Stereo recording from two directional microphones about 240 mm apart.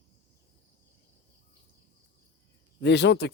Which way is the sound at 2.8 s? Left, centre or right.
Left.